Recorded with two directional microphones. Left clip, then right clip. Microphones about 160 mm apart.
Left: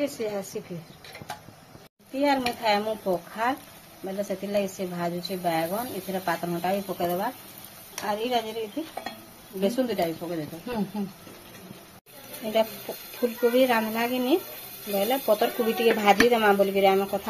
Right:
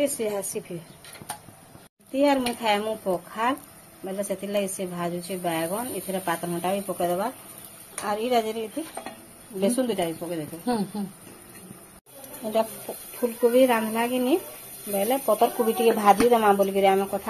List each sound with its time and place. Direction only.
0.0 s a woman's voice: 25° right (ahead or behind)
2.1 s a woman's voice: 15° right (ahead or behind)
12.5 s a woman's voice: centre (ahead or behind)